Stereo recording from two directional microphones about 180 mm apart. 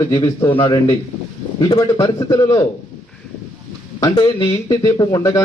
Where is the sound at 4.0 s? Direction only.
20° left (ahead or behind).